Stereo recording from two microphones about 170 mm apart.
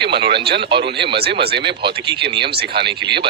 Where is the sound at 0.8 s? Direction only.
90° right.